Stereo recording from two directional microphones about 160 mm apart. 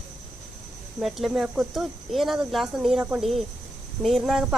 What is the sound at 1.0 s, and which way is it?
Speech, centre (ahead or behind).